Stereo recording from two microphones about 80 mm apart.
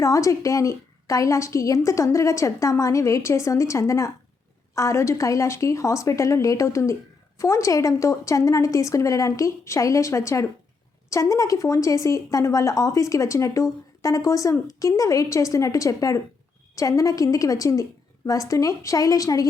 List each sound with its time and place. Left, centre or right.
0.0 s a woman's voice: left